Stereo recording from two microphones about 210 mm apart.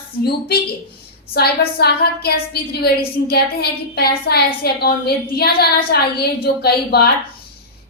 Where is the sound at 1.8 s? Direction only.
50° left (ahead or behind).